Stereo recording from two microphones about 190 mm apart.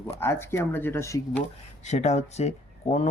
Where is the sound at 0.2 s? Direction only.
10° left (ahead or behind).